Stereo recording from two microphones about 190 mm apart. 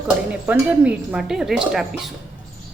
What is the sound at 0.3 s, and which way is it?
Speech, 5° right (ahead or behind).